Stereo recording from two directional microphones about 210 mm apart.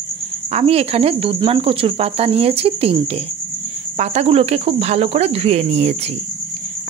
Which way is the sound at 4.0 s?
30° right (ahead or behind).